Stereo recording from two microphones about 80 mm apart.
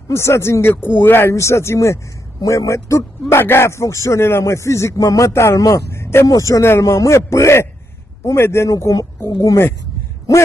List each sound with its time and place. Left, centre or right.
0.1 s speech: left
6.2 s speech: left
6.6 s speech: left